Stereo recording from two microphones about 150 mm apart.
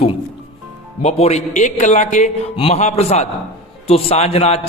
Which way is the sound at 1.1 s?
45° left (ahead or behind).